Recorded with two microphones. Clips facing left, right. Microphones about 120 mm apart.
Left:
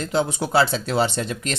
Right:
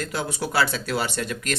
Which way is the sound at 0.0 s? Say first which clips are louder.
Left 5 dB; 25° left (ahead or behind).